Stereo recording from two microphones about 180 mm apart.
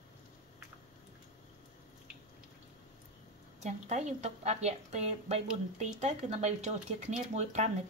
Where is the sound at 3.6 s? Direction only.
40° right (ahead or behind).